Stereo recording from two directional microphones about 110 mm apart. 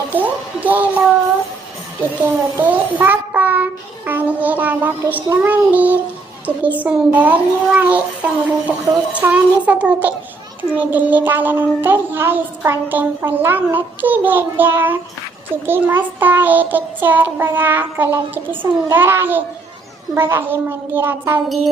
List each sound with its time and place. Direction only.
0.1 s a child's voice: 15° right (ahead or behind)
2.2 s a child's voice: 20° right (ahead or behind)